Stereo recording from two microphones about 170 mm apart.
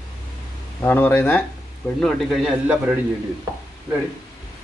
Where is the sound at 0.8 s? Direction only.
10° left (ahead or behind); by 3.0 s 5° right (ahead or behind).